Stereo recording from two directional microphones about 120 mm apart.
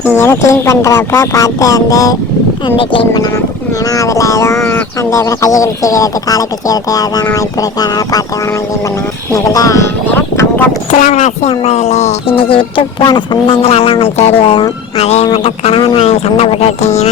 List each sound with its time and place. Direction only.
0.0 s speech: 20° left (ahead or behind)
2.6 s speech: 45° left (ahead or behind)
3.1 s speech: 35° left (ahead or behind)
9.3 s speech: 30° left (ahead or behind)
11.0 s speech: 75° left (ahead or behind)
12.5 s speech: 45° left (ahead or behind)
16.0 s speech: 60° left (ahead or behind)